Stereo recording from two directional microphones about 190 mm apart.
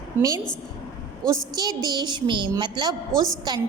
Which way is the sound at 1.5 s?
20° right (ahead or behind).